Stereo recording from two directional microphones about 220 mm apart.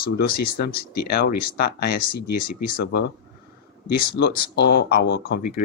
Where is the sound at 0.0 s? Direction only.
45° left (ahead or behind).